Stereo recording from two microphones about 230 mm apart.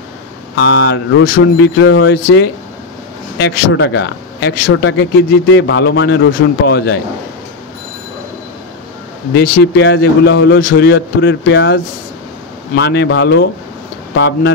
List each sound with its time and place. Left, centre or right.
0.6 s a man's voice: left
9.8 s a man's voice: left